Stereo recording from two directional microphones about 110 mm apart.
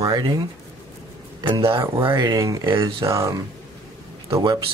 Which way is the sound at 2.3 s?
30° right (ahead or behind).